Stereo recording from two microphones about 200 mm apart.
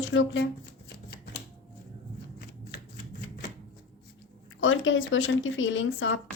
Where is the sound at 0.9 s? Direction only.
55° left (ahead or behind).